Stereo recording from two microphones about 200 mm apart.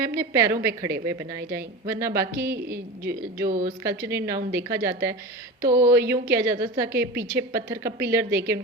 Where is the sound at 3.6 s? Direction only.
15° right (ahead or behind).